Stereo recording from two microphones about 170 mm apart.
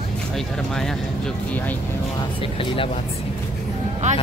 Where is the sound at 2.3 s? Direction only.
30° left (ahead or behind).